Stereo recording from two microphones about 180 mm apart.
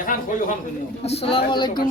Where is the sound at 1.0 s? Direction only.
35° left (ahead or behind).